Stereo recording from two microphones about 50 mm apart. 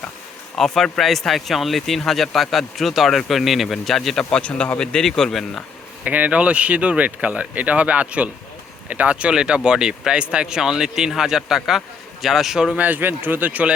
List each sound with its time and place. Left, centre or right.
0.5 s a man's voice: centre
4.2 s a man's voice: centre
6.1 s speech: right
9.3 s a man's voice: centre
12.7 s speech: right